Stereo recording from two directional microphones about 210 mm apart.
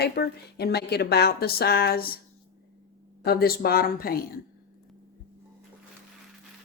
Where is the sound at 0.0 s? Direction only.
50° left (ahead or behind).